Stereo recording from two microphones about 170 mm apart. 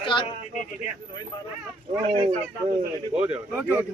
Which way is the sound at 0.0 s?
30° left (ahead or behind).